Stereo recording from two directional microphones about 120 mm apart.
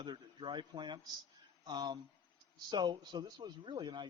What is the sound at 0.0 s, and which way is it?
A man's voice, 40° right (ahead or behind).